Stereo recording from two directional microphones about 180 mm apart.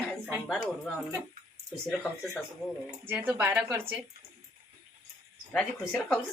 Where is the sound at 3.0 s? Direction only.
10° right (ahead or behind).